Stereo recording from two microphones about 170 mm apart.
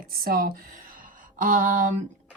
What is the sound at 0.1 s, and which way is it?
Speech, 60° right (ahead or behind).